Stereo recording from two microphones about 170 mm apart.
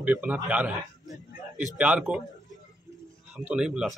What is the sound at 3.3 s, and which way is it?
Speech, 5° right (ahead or behind).